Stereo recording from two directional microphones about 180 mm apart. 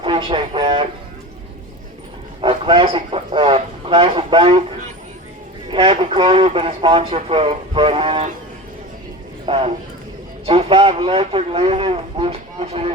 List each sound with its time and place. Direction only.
0.0 s a sound: 30° right (ahead or behind)
2.4 s a man's voice: 30° right (ahead or behind)
5.7 s speech: 30° right (ahead or behind)
9.5 s speech: 35° right (ahead or behind)